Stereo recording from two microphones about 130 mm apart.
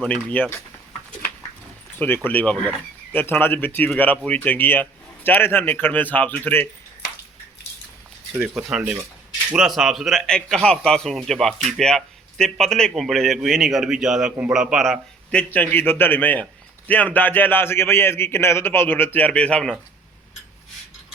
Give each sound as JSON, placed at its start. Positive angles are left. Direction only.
{"t": 0.0, "sound": "a man's voice", "side_deg": 10}
{"t": 2.0, "sound": "a man's voice", "side_deg": 15}
{"t": 8.8, "sound": "speech", "side_deg": -15}
{"t": 9.5, "sound": "a man's voice", "side_deg": -5}
{"t": 15.3, "sound": "a man's voice", "side_deg": 10}